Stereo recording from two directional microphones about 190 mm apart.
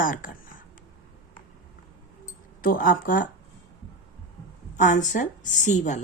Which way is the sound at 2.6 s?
45° left (ahead or behind).